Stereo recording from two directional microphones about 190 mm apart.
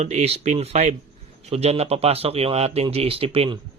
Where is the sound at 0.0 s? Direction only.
35° right (ahead or behind).